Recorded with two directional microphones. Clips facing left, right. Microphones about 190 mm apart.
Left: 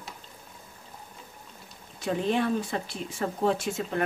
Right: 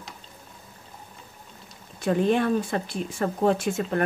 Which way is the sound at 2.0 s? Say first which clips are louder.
Right 4 dB; 50° right (ahead or behind).